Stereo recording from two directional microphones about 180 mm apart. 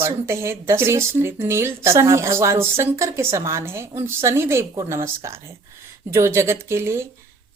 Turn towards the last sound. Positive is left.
turn(degrees=-15)  # may be behind; listen again after turning